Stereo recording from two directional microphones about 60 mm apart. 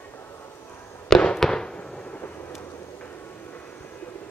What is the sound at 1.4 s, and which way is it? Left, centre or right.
Fireworks, centre.